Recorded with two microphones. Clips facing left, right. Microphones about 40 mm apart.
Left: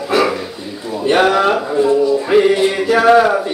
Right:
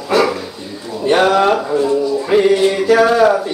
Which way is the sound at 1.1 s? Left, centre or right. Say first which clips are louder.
Right 1 dB; centre.